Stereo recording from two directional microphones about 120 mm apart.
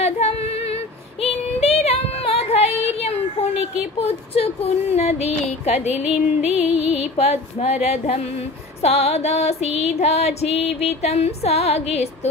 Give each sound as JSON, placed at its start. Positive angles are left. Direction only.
{"t": 0.0, "sound": "female singing", "side_deg": 60}